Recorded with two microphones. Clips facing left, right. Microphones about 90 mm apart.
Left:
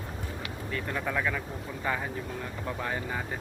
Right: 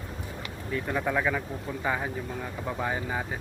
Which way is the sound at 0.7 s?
10° right (ahead or behind).